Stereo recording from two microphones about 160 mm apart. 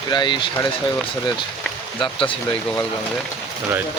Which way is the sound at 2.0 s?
35° left (ahead or behind).